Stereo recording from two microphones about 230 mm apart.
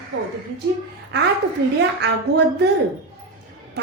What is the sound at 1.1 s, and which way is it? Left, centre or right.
Speech, right.